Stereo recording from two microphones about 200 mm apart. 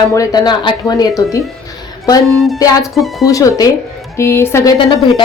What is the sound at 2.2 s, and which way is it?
Speech, centre (ahead or behind).